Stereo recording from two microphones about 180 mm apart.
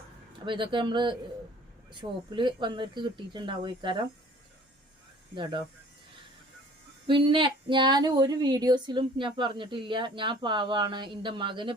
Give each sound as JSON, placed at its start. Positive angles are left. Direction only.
{"t": 0.3, "sound": "speech", "side_deg": -25}
{"t": 5.3, "sound": "speech", "side_deg": -25}
{"t": 7.1, "sound": "speech", "side_deg": -25}